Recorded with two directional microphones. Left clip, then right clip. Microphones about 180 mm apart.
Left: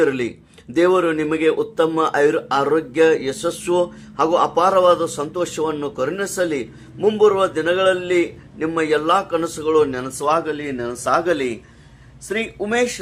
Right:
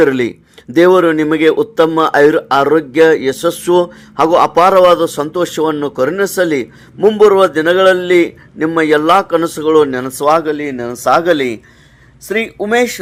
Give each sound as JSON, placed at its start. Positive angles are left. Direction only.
{"t": 0.0, "sound": "a man's voice", "side_deg": -40}